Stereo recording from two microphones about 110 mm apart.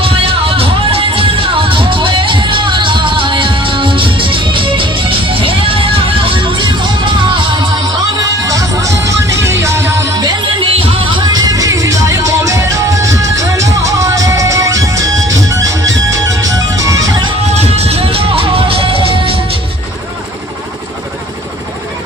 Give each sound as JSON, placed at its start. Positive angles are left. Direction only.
{"t": 0.0, "sound": "music", "side_deg": -60}
{"t": 8.4, "sound": "music", "side_deg": -30}
{"t": 10.8, "sound": "music", "side_deg": -45}
{"t": 17.5, "sound": "music", "side_deg": -70}